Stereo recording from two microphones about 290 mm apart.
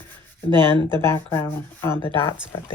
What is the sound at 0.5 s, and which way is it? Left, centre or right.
Speech, centre.